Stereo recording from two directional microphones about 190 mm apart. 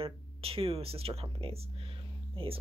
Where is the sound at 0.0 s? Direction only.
30° right (ahead or behind).